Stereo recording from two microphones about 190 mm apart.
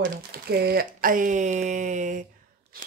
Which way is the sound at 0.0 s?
55° right (ahead or behind).